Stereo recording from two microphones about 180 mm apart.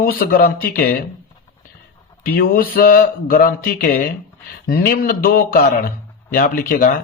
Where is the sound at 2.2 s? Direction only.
55° left (ahead or behind).